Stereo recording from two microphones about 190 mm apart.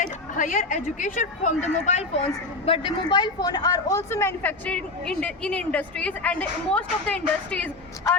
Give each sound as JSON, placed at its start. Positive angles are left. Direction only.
{"t": 0.0, "sound": "a woman's voice", "side_deg": 45}